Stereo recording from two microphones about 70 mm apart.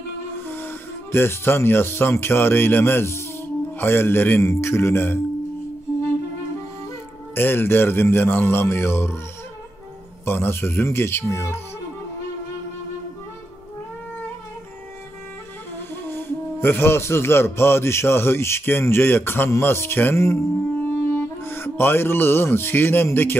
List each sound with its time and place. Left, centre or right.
0.5 s speech: left
4.4 s a man's voice: left
7.3 s a man's voice: left
10.2 s a man's voice: left
15.9 s a man's voice: left
20.9 s music: left